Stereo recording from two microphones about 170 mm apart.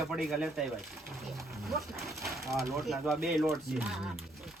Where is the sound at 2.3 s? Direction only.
15° right (ahead or behind).